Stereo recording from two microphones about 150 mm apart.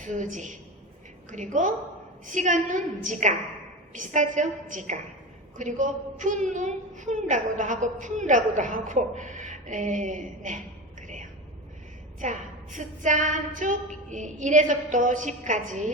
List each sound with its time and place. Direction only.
0.0 s a woman's voice: 55° right (ahead or behind)
11.0 s a sound: 55° right (ahead or behind)
12.2 s a woman's voice: 55° right (ahead or behind)